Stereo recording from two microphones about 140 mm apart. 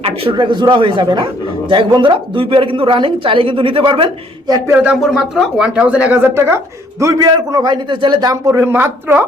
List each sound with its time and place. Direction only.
0.0 s a man's voice: 40° right (ahead or behind)
4.8 s a man's voice: 5° right (ahead or behind)